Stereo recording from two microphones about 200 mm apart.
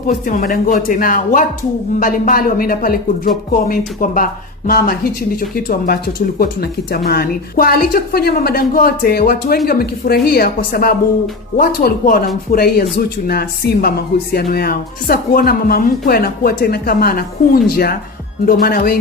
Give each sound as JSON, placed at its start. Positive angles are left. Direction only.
{"t": 0.3, "sound": "speech", "side_deg": 45}